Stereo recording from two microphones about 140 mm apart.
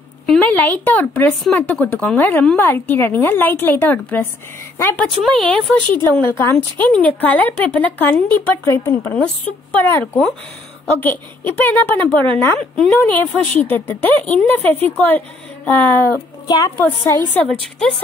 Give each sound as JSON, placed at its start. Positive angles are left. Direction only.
{"t": 0.3, "sound": "a woman's voice", "side_deg": 10}
{"t": 5.2, "sound": "speech", "side_deg": 5}
{"t": 6.1, "sound": "a woman's voice", "side_deg": 15}
{"t": 16.4, "sound": "a woman's voice", "side_deg": 25}
{"t": 16.7, "sound": "a woman's voice", "side_deg": 15}